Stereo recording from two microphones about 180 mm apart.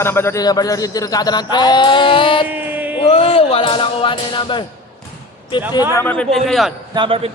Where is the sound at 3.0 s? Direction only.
30° left (ahead or behind).